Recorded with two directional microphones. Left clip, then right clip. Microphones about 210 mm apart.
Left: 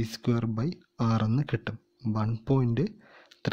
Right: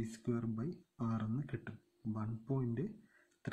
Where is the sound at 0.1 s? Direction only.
40° left (ahead or behind).